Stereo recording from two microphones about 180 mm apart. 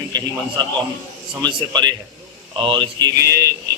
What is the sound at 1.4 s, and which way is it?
A man's voice, 25° right (ahead or behind).